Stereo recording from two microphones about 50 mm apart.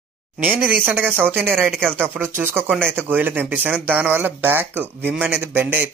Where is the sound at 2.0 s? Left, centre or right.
Right.